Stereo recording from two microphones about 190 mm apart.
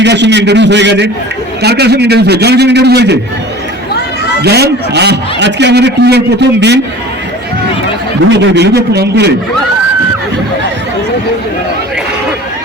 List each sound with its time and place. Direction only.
0.0 s a man's voice: 65° right (ahead or behind)
4.4 s a man's voice: 60° right (ahead or behind)
8.3 s a man's voice: 65° right (ahead or behind)